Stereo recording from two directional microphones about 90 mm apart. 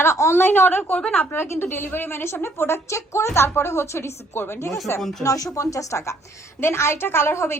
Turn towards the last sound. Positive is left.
turn(degrees=30)  # may be behind; listen again after turning